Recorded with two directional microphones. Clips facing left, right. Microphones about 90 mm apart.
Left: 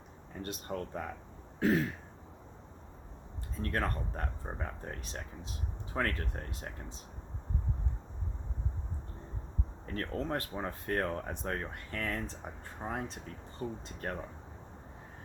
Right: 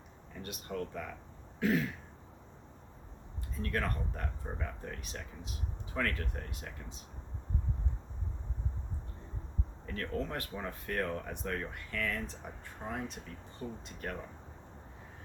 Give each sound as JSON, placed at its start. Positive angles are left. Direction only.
{"t": 0.4, "sound": "speech", "side_deg": 35}
{"t": 3.6, "sound": "speech", "side_deg": 35}
{"t": 9.8, "sound": "speech", "side_deg": 35}